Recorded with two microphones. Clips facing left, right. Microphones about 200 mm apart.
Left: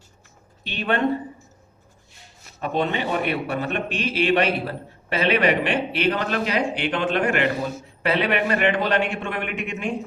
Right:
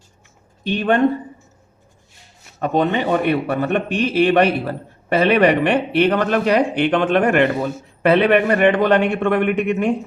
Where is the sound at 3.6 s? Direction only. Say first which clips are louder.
Right 7 dB; 55° right (ahead or behind).